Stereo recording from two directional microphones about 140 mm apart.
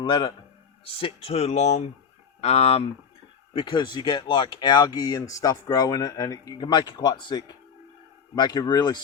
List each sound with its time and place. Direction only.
0.0 s speech: 35° left (ahead or behind)
3.5 s speech: 35° left (ahead or behind)